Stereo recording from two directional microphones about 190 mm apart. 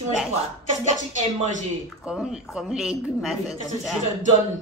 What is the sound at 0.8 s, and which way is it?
Speech, 40° right (ahead or behind).